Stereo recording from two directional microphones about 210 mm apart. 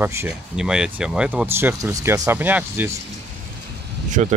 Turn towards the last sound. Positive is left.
turn(degrees=-35)  # may be behind; listen again after turning